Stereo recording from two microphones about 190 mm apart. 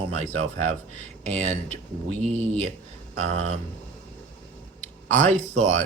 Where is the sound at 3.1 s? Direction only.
35° right (ahead or behind).